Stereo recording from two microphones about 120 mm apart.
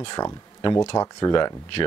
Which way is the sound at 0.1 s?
35° left (ahead or behind).